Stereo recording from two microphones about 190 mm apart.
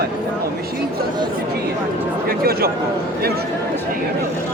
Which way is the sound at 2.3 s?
55° right (ahead or behind).